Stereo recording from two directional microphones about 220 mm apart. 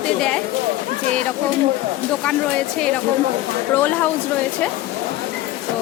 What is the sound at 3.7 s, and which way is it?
Speech, 10° left (ahead or behind).